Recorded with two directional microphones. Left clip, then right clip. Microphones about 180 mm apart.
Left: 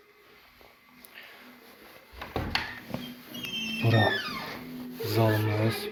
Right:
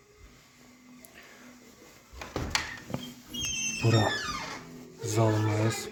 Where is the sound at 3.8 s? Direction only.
30° right (ahead or behind).